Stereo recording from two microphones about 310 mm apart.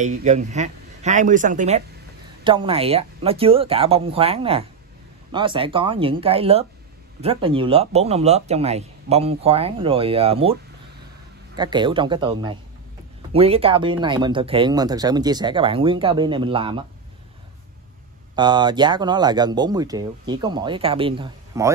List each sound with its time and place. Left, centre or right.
0.0 s speech: right
18.3 s speech: centre